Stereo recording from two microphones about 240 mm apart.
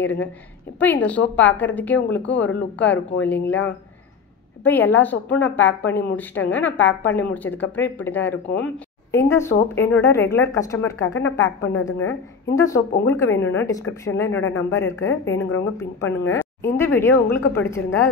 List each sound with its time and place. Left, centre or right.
0.0 s a woman's voice: centre
4.6 s a woman's voice: centre
11.2 s a woman's voice: left
11.8 s a woman's voice: centre